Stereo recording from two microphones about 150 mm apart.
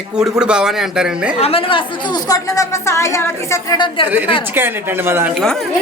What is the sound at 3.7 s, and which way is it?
Speech, 30° left (ahead or behind).